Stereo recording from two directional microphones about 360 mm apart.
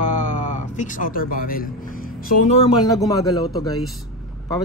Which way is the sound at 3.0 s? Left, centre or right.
Centre.